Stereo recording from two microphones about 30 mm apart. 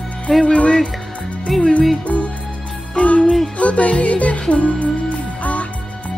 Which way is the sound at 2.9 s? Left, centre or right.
Left.